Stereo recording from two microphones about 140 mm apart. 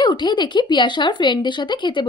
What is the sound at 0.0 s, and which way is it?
A woman's voice, 35° left (ahead or behind).